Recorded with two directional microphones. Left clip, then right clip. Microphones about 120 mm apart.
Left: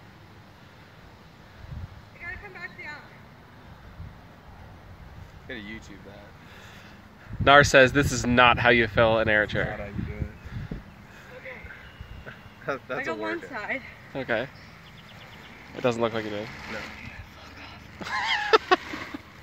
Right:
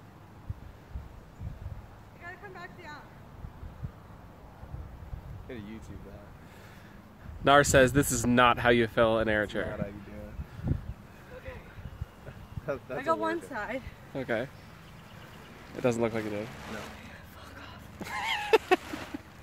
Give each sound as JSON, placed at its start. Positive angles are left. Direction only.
{"t": 2.2, "sound": "vehicle", "side_deg": -20}
{"t": 5.5, "sound": "speech", "side_deg": 0}
{"t": 7.4, "sound": "speech", "side_deg": -20}
{"t": 12.6, "sound": "speech", "side_deg": 0}
{"t": 13.1, "sound": "speech", "side_deg": -15}
{"t": 15.7, "sound": "speech", "side_deg": -25}
{"t": 17.9, "sound": "a sound", "side_deg": -25}